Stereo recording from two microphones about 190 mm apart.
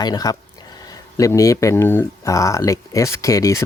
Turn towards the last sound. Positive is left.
turn(degrees=15)  # may be behind; listen again after turning